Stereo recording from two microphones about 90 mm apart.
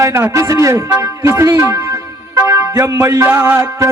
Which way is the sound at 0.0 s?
35° right (ahead or behind).